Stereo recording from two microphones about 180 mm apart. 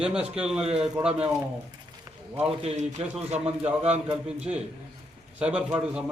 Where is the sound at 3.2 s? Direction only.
35° right (ahead or behind).